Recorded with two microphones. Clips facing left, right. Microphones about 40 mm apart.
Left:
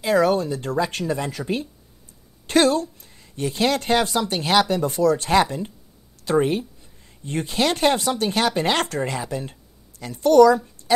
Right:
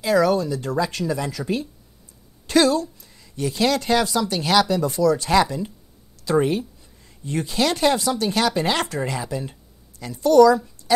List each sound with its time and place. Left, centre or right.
0.0 s speech: left
2.4 s speech: left